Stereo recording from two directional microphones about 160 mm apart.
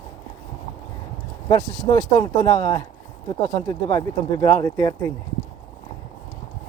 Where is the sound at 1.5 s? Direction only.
20° left (ahead or behind).